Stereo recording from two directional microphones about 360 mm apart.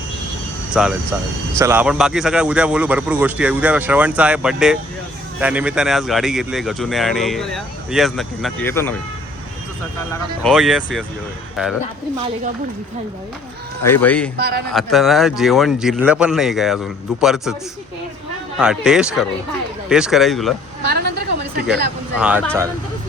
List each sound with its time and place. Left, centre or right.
0.7 s speech: centre
10.4 s speech: centre
13.8 s speech: centre
14.3 s a man's voice: right
14.7 s speech: centre
18.5 s speech: centre
22.2 s speech: centre